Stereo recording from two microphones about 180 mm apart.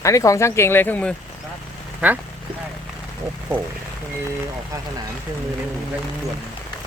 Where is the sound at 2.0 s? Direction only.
5° right (ahead or behind).